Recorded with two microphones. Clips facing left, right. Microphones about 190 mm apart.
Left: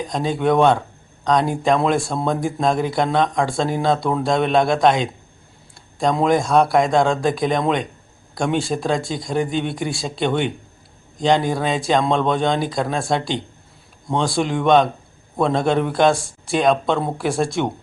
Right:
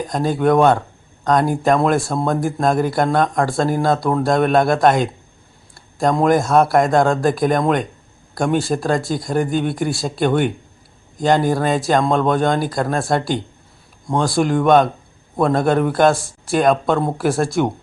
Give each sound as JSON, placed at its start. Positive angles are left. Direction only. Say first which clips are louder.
{"t": 0.0, "sound": "speech", "louder": "right 3 dB", "side_deg": -5}